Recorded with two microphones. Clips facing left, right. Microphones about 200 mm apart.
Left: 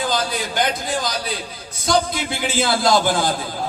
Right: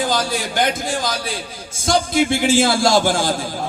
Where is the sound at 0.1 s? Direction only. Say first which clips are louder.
Right 2 dB; 50° right (ahead or behind).